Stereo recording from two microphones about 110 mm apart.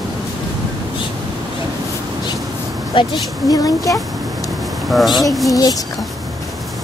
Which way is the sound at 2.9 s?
50° left (ahead or behind).